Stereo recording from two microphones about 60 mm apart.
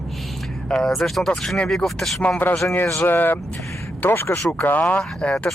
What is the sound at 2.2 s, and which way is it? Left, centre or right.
Speech, left.